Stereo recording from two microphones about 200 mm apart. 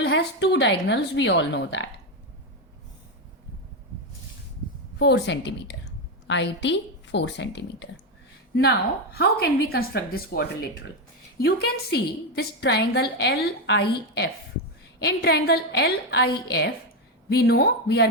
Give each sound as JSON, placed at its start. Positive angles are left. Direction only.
{"t": 0.0, "sound": "a woman's voice", "side_deg": 60}
{"t": 4.9, "sound": "a woman's voice", "side_deg": 55}
{"t": 9.1, "sound": "a woman's voice", "side_deg": 50}